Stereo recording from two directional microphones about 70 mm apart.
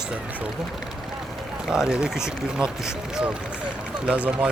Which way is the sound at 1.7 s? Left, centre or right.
Centre.